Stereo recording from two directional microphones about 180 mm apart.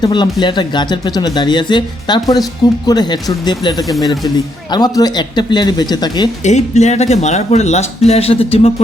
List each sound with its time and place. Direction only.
0.0 s speech: 25° left (ahead or behind)
6.4 s speech: 40° left (ahead or behind)